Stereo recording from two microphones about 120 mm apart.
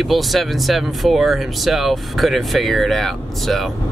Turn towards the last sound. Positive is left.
turn(degrees=0)  # may be behind; listen again after turning